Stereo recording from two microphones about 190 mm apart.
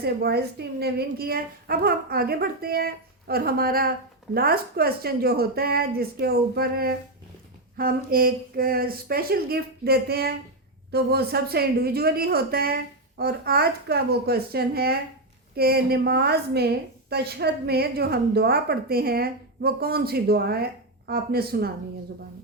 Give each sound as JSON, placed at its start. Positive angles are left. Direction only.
{"t": 0.0, "sound": "a woman's voice", "side_deg": -55}